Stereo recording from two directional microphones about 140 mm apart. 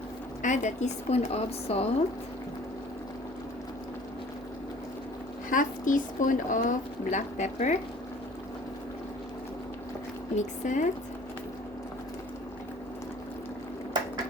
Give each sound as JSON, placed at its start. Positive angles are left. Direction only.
{"t": 0.4, "sound": "a woman's voice", "side_deg": 60}
{"t": 5.5, "sound": "speech", "side_deg": 70}
{"t": 10.3, "sound": "speech", "side_deg": 60}